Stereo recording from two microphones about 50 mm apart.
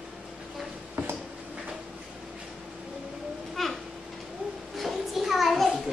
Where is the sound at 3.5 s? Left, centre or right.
Centre.